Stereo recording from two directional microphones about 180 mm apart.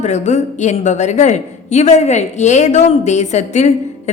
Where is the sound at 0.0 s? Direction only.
40° left (ahead or behind).